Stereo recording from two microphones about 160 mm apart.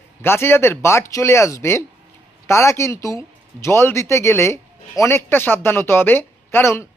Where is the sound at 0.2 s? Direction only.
15° left (ahead or behind).